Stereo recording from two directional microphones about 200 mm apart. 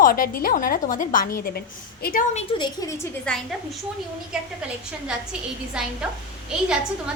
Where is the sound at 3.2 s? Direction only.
Centre (ahead or behind).